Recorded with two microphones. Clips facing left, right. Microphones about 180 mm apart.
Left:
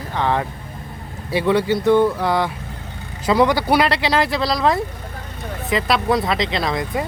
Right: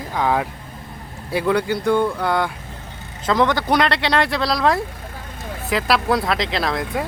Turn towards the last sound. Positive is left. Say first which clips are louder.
# left 1 dB
turn(degrees=0)  # may be behind; listen again after turning